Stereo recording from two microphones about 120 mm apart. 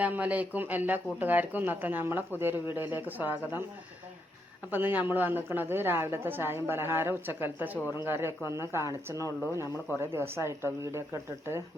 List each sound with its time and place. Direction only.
0.0 s a woman's voice: 10° right (ahead or behind)
4.7 s a woman's voice: 15° right (ahead or behind)
9.1 s speech: 25° left (ahead or behind)
10.0 s speech: 20° right (ahead or behind)